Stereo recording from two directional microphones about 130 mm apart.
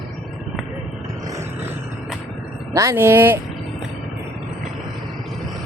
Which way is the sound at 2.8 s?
20° right (ahead or behind).